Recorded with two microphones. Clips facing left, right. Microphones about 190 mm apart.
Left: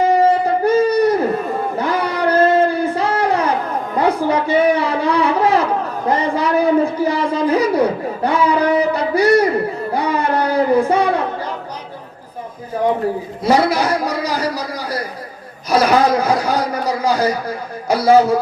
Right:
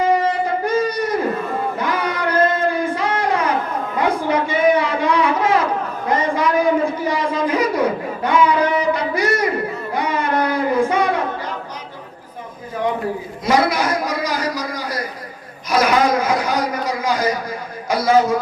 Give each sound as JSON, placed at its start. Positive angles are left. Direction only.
{"t": 0.2, "sound": "wind instrument", "side_deg": 35}
{"t": 1.7, "sound": "music", "side_deg": 30}
{"t": 3.9, "sound": "a sound", "side_deg": 35}
{"t": 9.9, "sound": "child singing", "side_deg": 35}
{"t": 13.4, "sound": "a sound", "side_deg": 35}
{"t": 15.7, "sound": "a man's voice", "side_deg": 35}